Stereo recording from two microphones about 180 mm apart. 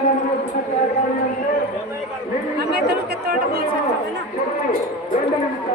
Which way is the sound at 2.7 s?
60° right (ahead or behind).